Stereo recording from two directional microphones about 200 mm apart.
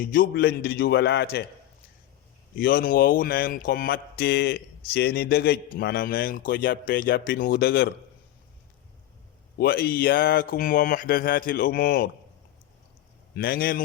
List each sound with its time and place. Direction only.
0.0 s speech: 45° left (ahead or behind)
2.6 s speech: 45° left (ahead or behind)
9.6 s speech: 45° left (ahead or behind)
13.3 s speech: 50° left (ahead or behind)